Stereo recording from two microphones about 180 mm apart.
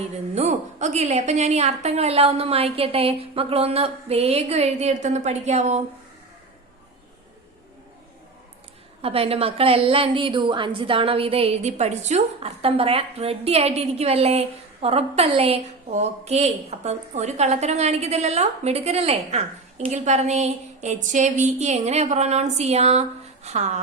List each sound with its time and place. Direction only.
0.3 s a woman's voice: 40° right (ahead or behind)
9.0 s a woman's voice: 35° right (ahead or behind)